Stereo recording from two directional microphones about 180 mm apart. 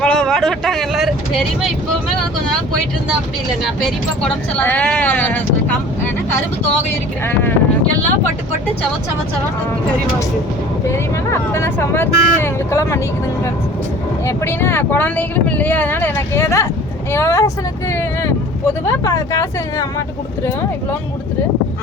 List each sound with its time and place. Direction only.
0.0 s speech: 5° left (ahead or behind)
3.6 s speech: 5° left (ahead or behind)
10.8 s speech: 15° left (ahead or behind)
14.3 s speech: 15° left (ahead or behind)
18.9 s speech: 15° left (ahead or behind)